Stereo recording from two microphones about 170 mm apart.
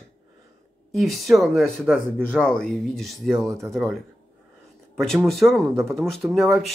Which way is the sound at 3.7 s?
Centre (ahead or behind).